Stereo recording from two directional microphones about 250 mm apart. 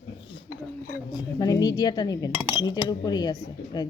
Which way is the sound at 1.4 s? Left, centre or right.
Centre.